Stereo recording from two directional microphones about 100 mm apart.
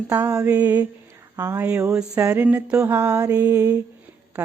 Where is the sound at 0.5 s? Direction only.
15° right (ahead or behind).